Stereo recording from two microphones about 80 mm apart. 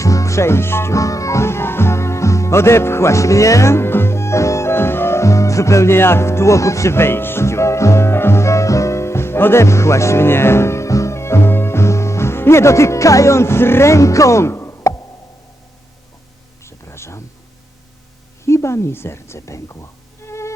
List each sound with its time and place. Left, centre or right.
0.0 s music: left
16.6 s a sound: left
18.4 s a woman's voice: left
20.2 s music: left